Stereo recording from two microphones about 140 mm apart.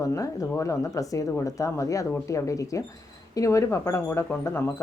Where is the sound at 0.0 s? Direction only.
25° left (ahead or behind).